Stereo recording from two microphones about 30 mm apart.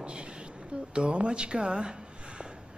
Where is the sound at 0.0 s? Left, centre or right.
Right.